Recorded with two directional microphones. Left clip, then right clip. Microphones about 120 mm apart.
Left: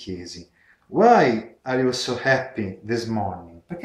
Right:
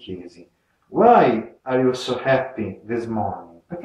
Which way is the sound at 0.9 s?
25° left (ahead or behind).